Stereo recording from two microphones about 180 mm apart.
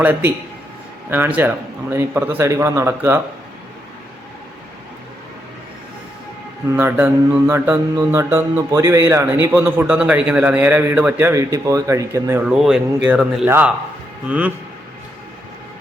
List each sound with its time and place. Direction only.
0.0 s mantra: 10° right (ahead or behind)
6.7 s mantra: 10° right (ahead or behind)
12.4 s speech: 5° right (ahead or behind)
13.5 s mantra: 10° right (ahead or behind)